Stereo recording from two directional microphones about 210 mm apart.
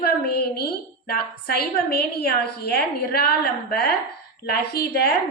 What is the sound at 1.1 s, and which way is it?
A woman's voice, 45° left (ahead or behind).